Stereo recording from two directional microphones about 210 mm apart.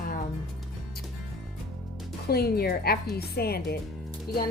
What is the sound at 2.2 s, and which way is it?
Speech, 50° left (ahead or behind).